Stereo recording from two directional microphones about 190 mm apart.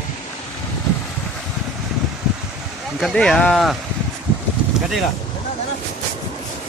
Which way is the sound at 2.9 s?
Centre (ahead or behind).